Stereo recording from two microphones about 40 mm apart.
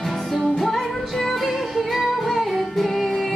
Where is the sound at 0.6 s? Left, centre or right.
Centre.